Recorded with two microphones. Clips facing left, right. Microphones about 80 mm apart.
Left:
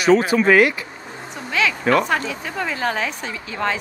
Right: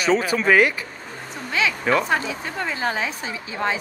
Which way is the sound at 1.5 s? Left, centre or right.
Centre.